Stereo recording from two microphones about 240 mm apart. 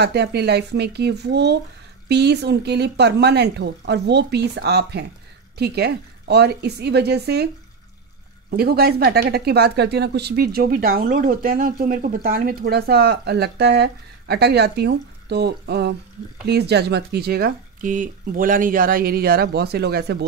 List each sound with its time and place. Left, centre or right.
0.0 s speech: right
8.5 s speech: right